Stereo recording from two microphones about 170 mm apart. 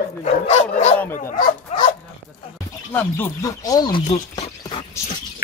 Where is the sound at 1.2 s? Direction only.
55° left (ahead or behind).